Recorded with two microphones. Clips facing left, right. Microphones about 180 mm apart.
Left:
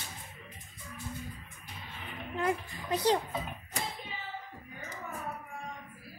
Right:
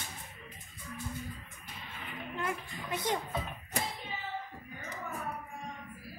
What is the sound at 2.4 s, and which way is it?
Speech, 35° left (ahead or behind).